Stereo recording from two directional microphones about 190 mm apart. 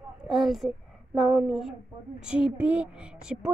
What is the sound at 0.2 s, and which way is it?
A woman's voice, centre (ahead or behind).